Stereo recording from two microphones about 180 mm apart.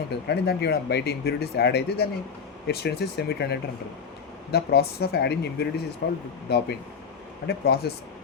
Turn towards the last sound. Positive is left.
turn(degrees=65)  # may be behind; listen again after turning